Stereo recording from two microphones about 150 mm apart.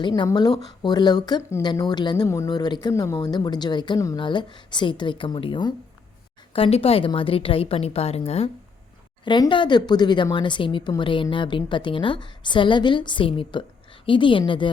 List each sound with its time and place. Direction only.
0.1 s speech: 25° left (ahead or behind)
1.6 s speech: 30° left (ahead or behind)
9.2 s speech: 30° left (ahead or behind)